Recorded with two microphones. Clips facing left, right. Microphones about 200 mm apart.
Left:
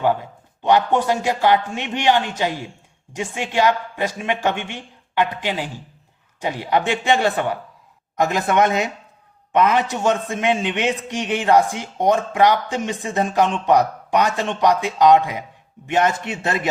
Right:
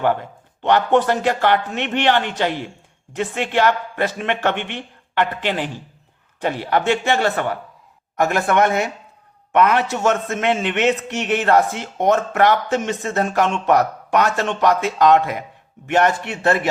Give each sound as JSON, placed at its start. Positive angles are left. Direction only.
{"t": 0.0, "sound": "a man's voice", "side_deg": 10}